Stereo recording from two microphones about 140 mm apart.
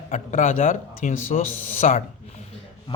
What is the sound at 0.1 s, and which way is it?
A man's voice, 60° left (ahead or behind).